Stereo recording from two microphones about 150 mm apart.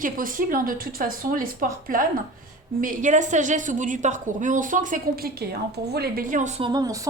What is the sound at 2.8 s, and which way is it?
A woman's voice, 60° right (ahead or behind).